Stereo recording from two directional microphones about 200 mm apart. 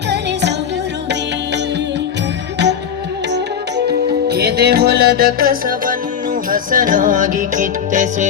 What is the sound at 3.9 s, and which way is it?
Music, 55° right (ahead or behind).